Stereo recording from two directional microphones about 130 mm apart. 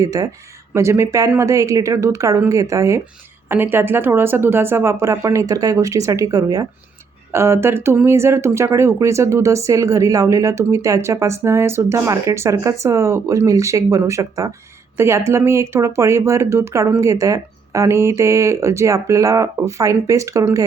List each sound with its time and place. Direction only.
0.0 s speech: 25° right (ahead or behind)